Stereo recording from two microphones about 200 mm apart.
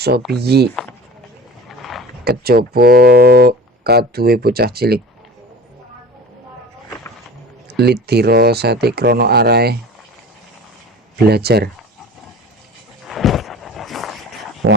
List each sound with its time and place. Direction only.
0.3 s speech: 55° right (ahead or behind)
1.6 s a sound: centre (ahead or behind)
2.2 s speech: 50° right (ahead or behind)
7.7 s speech: 50° right (ahead or behind)
11.2 s speech: 50° right (ahead or behind)
13.1 s a sound: centre (ahead or behind)